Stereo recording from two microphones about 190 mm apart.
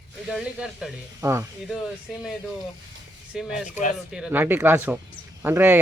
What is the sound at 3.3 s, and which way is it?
Speech, 5° right (ahead or behind).